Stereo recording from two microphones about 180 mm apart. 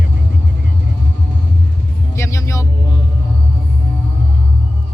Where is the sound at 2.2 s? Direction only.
15° left (ahead or behind).